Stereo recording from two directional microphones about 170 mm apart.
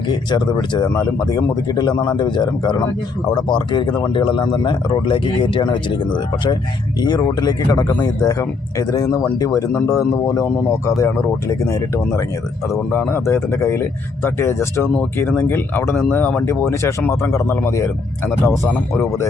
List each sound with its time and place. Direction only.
0.1 s speech: 25° left (ahead or behind)